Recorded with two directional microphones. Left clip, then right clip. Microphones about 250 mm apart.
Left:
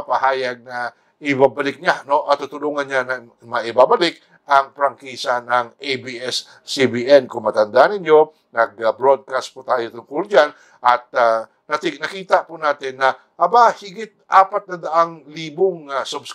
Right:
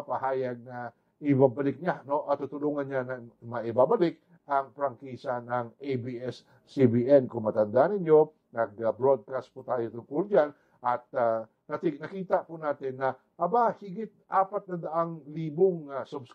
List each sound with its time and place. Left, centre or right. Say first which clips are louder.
0.1 s speech: left 12 dB; centre
7.2 s speech: left 10 dB; left
7.7 s a man's voice: left 10 dB; centre
15.5 s a man's voice: left 7 dB; left
15.8 s speech: left 12 dB; centre